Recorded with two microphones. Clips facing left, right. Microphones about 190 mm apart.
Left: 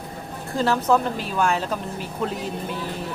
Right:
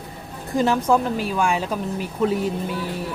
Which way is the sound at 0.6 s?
15° right (ahead or behind).